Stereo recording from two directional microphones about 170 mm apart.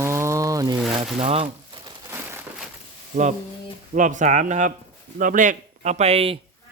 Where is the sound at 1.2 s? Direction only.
35° right (ahead or behind).